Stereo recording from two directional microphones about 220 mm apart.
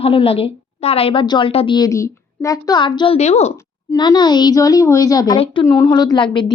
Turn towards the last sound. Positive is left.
turn(degrees=20)  # may be behind; listen again after turning